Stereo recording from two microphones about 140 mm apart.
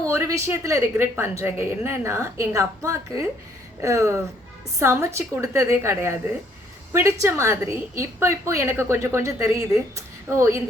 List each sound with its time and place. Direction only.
0.1 s a woman's voice: 20° right (ahead or behind)